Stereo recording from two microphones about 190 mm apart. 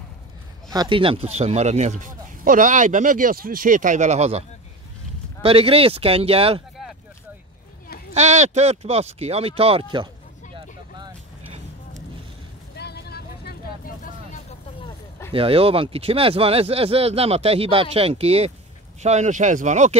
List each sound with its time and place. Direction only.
0.7 s speech: 25° right (ahead or behind)
8.1 s speech: 35° right (ahead or behind)
10.5 s vehicle: 30° right (ahead or behind)
12.7 s vehicle: 60° left (ahead or behind)
15.3 s speech: 30° right (ahead or behind)